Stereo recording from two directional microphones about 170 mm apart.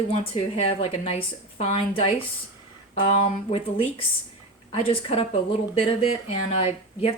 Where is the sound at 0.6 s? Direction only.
35° left (ahead or behind).